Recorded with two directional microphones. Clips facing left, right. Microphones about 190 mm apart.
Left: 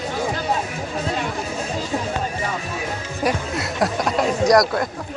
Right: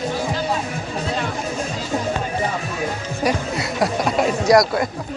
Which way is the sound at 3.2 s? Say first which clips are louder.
Right 1 dB; centre (ahead or behind).